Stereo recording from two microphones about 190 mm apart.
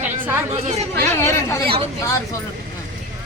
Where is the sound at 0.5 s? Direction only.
35° right (ahead or behind).